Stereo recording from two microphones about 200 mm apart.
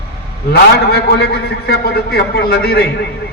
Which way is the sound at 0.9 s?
55° left (ahead or behind).